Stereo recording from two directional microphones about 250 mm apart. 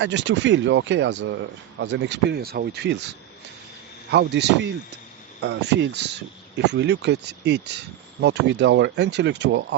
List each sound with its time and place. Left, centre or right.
0.0 s speech: right
4.1 s speech: right